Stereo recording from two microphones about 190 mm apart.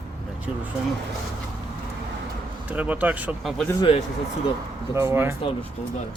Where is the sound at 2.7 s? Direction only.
10° right (ahead or behind).